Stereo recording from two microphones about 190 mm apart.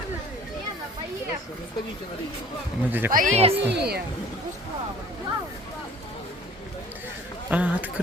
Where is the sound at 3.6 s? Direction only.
60° right (ahead or behind).